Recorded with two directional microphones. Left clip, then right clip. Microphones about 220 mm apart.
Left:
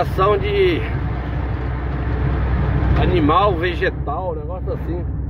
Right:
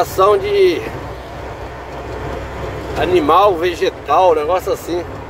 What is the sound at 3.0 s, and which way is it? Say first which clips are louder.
Speech: right 5 dB; 30° right (ahead or behind).